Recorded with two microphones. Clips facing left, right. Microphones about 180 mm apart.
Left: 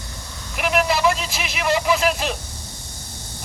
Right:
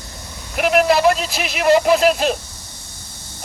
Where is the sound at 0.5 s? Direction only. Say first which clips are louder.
Right 6 dB; 45° right (ahead or behind).